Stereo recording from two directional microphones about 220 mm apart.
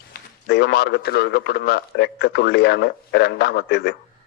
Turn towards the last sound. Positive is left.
turn(degrees=50)  # may be behind; listen again after turning